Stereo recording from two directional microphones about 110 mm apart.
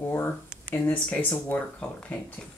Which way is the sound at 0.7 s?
15° left (ahead or behind).